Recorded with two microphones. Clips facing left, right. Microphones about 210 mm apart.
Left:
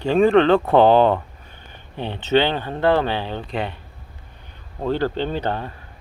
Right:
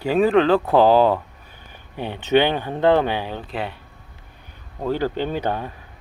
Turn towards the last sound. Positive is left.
turn(degrees=-10)  # may be behind; listen again after turning